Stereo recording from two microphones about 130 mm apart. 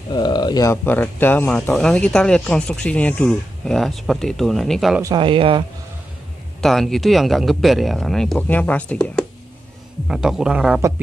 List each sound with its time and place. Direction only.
0.1 s speech: 35° left (ahead or behind)
0.7 s speech: 15° left (ahead or behind); by 5.0 s centre (ahead or behind)
5.0 s speech: 35° right (ahead or behind)
6.6 s speech: centre (ahead or behind)
10.0 s speech: 5° right (ahead or behind)